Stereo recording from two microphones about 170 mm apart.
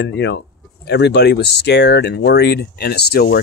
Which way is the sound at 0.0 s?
90° left.